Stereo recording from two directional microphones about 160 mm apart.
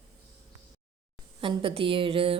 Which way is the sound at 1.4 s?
35° right (ahead or behind).